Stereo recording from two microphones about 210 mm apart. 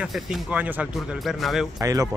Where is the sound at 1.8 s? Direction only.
15° right (ahead or behind).